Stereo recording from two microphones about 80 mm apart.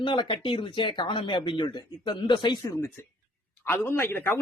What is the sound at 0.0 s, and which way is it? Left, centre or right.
Speech, left.